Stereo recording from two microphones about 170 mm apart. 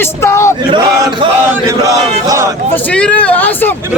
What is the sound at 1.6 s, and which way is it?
Battle cry, 20° right (ahead or behind).